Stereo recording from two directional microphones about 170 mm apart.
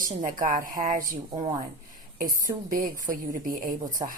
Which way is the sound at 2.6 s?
55° right (ahead or behind).